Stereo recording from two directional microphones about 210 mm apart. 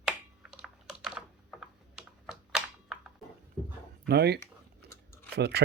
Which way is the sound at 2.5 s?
5° right (ahead or behind).